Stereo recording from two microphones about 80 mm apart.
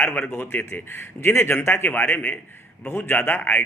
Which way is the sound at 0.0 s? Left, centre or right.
Left.